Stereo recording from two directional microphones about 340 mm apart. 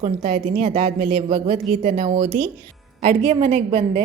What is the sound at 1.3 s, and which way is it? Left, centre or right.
A woman's voice, centre.